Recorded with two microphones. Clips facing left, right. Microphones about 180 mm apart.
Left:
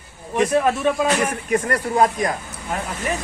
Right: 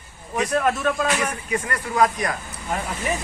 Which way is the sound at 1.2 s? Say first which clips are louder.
Left 5 dB; 45° left (ahead or behind).